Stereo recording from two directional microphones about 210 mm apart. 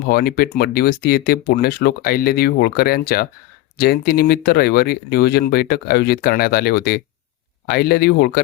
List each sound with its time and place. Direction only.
0.1 s speech: 45° left (ahead or behind)